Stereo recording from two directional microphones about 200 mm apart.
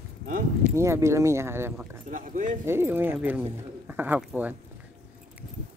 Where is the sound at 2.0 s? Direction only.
40° right (ahead or behind).